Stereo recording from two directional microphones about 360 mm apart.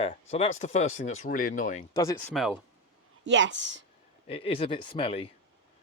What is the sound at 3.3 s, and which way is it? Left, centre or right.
Speech, right.